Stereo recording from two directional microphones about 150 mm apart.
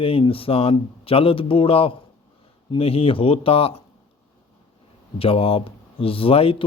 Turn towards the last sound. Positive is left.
turn(degrees=40)  # may be behind; listen again after turning